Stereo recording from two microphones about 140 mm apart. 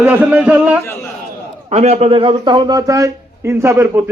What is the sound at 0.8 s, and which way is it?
Speech, 15° left (ahead or behind).